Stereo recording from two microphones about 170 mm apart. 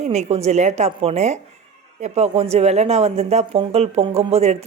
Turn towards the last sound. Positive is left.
turn(degrees=-35)  # may be behind; listen again after turning